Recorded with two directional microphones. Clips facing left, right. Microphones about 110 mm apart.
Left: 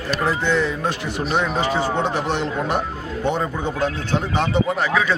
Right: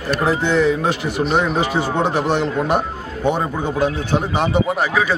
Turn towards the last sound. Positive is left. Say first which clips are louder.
# right 2 dB
turn(degrees=-10)  # may be behind; listen again after turning